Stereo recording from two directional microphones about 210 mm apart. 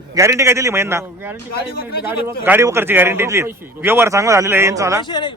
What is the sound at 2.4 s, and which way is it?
Speech, 10° right (ahead or behind).